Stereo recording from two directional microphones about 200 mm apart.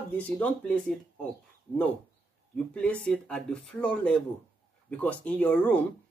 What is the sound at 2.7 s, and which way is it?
Speech, 5° left (ahead or behind).